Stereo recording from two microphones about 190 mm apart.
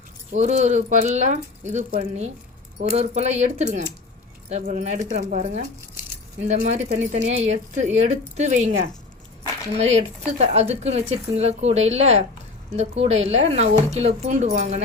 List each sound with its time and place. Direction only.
0.3 s speech: 35° right (ahead or behind)